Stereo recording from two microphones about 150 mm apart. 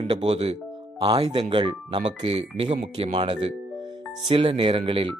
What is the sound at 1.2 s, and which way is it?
Speech, 30° right (ahead or behind).